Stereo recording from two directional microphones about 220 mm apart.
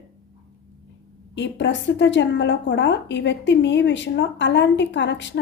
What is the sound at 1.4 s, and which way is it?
A woman's voice, 55° left (ahead or behind).